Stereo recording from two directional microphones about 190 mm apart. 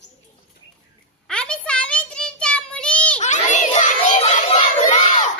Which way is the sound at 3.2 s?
40° left (ahead or behind).